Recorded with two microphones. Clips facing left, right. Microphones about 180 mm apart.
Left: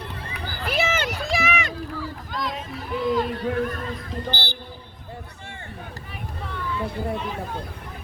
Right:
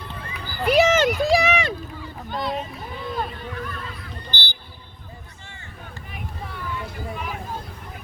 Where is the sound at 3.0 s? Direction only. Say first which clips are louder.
Left 7 dB; 90° left.